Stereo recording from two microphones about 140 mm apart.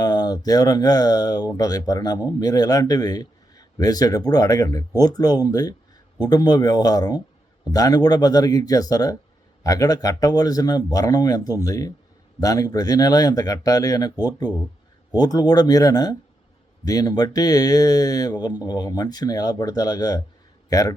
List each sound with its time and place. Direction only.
0.0 s a man's voice: 30° left (ahead or behind)